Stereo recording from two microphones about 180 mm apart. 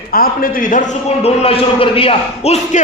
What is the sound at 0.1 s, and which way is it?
A man's voice, 55° left (ahead or behind).